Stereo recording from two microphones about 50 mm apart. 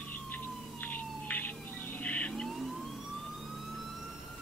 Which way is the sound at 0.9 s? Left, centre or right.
Left.